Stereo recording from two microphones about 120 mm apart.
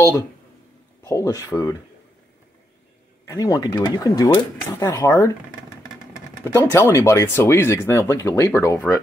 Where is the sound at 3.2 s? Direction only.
25° left (ahead or behind).